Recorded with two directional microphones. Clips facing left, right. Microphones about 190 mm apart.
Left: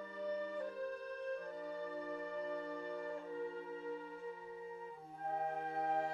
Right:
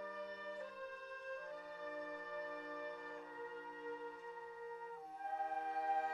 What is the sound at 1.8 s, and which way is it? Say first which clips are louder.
Music: left 3 dB; 30° left (ahead or behind).